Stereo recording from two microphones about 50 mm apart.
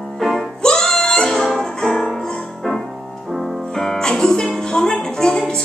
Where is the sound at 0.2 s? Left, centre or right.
Centre.